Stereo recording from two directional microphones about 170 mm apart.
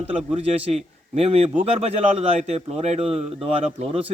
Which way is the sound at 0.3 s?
40° right (ahead or behind).